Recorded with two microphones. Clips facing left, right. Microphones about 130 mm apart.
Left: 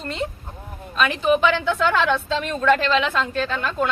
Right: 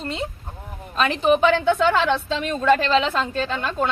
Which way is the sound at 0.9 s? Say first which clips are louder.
Right 1 dB; 30° right (ahead or behind).